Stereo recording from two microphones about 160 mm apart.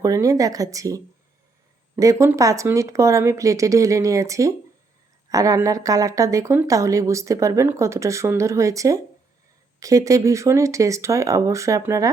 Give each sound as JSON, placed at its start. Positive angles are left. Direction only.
{"t": 0.0, "sound": "speech", "side_deg": -20}